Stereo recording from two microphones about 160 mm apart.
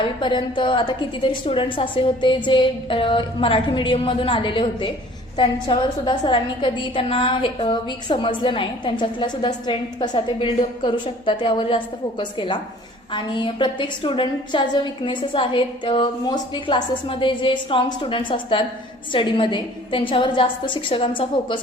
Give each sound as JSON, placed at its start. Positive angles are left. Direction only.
{"t": 0.0, "sound": "a woman's voice", "side_deg": 30}